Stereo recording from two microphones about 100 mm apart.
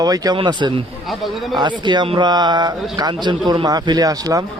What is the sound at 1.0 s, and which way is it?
Speech, centre (ahead or behind).